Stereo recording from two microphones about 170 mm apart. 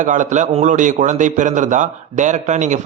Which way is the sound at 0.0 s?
45° right (ahead or behind).